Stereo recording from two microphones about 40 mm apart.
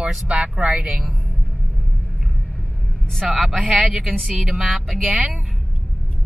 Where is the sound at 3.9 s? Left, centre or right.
Centre.